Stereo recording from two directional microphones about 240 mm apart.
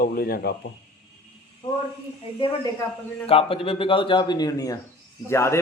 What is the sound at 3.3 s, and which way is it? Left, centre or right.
A man's voice, left.